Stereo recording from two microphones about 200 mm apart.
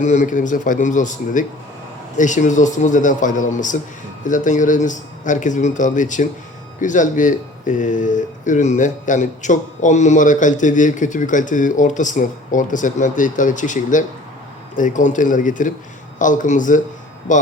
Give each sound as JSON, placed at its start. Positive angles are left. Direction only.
{"t": 0.0, "sound": "speech", "side_deg": 35}